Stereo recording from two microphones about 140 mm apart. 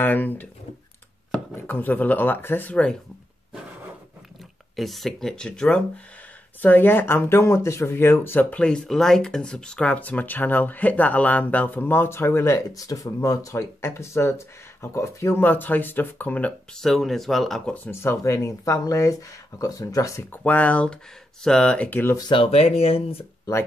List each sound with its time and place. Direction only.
0.0 s speech: 15° left (ahead or behind)
1.5 s speech: 15° left (ahead or behind)
4.7 s speech: centre (ahead or behind)
18.0 s speech: 20° left (ahead or behind)
22.3 s speech: 40° left (ahead or behind)